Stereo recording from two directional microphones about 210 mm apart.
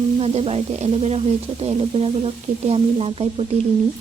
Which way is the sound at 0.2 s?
30° right (ahead or behind).